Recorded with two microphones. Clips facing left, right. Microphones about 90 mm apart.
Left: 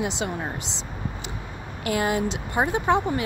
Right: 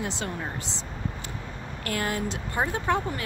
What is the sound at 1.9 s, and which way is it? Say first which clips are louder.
Speech: left 5 dB; 15° left (ahead or behind).